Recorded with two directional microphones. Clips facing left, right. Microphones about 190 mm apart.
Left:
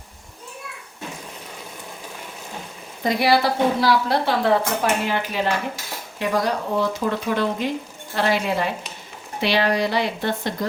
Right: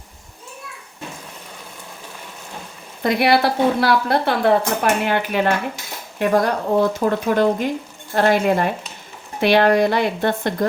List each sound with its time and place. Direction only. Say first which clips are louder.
3.0 s a woman's voice: right 2 dB; 60° right (ahead or behind)